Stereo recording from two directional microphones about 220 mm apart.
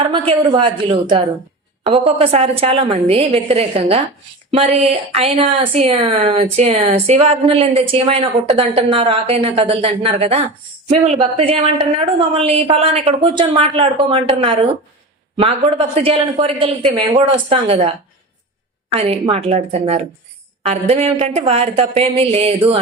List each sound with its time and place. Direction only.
0.0 s speech: 25° right (ahead or behind)